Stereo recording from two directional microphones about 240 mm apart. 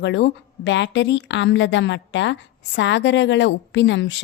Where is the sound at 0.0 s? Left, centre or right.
Left.